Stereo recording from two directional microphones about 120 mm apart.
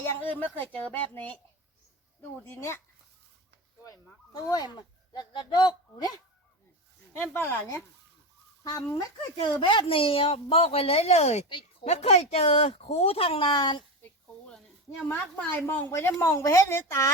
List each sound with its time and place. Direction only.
0.2 s speech: 15° left (ahead or behind)
2.4 s speech: 20° left (ahead or behind)
3.8 s speech: 30° left (ahead or behind)
7.2 s speech: 20° left (ahead or behind)
9.4 s a woman's voice: 40° left (ahead or behind); by 11.4 s 65° left (ahead or behind)
11.4 s a child's voice: 40° left (ahead or behind)
11.9 s a woman's voice: 65° left (ahead or behind); by 13.8 s 40° left (ahead or behind)
14.0 s a sound: 10° left (ahead or behind)
15.0 s speech: 15° left (ahead or behind)